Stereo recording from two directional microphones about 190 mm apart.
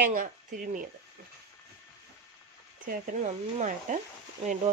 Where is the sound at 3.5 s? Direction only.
40° right (ahead or behind).